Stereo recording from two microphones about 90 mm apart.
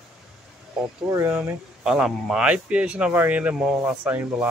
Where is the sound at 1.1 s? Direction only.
25° right (ahead or behind).